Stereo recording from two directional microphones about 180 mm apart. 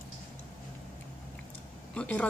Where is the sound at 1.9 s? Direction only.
5° left (ahead or behind).